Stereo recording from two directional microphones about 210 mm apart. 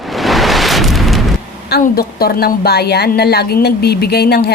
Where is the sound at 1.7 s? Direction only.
45° left (ahead or behind).